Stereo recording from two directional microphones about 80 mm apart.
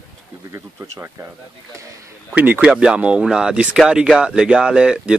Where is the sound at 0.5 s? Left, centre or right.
Right.